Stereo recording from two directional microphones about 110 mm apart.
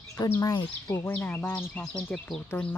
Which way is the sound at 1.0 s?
20° left (ahead or behind).